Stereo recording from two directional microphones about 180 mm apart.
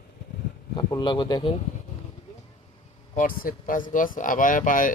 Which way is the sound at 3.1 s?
50° left (ahead or behind).